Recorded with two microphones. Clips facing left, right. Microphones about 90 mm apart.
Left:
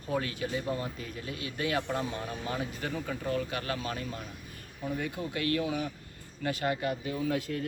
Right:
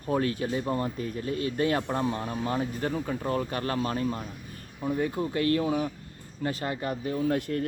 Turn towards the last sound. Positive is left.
turn(degrees=-55)  # may be behind; listen again after turning